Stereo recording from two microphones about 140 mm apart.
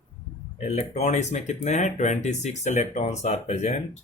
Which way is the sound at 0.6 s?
50° left (ahead or behind).